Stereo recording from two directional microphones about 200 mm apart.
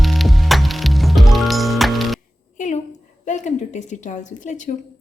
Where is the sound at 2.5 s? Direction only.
35° left (ahead or behind).